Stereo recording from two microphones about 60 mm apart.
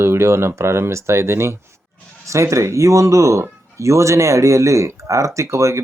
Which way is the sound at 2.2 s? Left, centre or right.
Right.